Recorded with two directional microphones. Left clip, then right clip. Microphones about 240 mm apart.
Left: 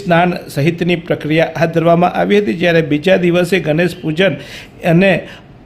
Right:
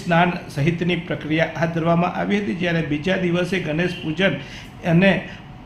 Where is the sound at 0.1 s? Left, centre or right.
Left.